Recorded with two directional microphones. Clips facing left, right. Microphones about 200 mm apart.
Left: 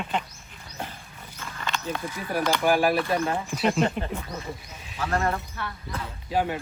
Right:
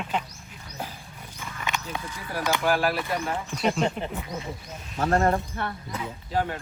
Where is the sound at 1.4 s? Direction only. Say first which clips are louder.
Even; 15° right (ahead or behind).